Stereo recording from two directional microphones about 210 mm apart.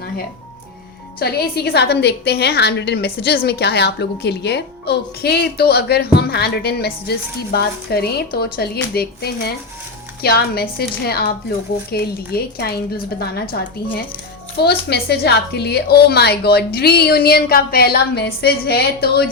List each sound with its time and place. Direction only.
1.2 s a woman's voice: 50° left (ahead or behind)